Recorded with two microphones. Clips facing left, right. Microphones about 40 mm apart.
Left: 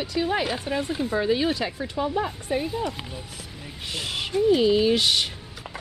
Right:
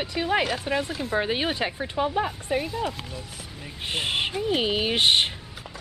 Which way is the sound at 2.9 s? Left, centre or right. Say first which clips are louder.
Left 1 dB; centre.